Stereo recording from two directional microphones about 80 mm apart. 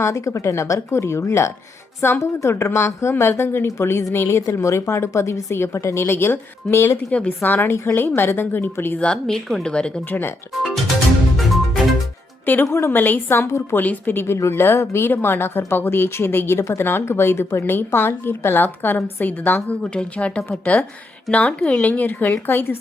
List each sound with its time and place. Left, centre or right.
0.0 s a woman's voice: left
7.1 s speech: centre
9.0 s a woman's voice: centre
10.1 s speech: left
11.3 s music: centre
12.6 s speech: left